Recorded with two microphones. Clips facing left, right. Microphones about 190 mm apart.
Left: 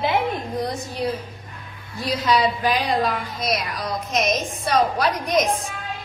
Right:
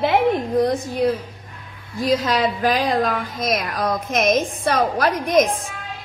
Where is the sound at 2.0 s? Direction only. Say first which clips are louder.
Right 2 dB; 45° right (ahead or behind).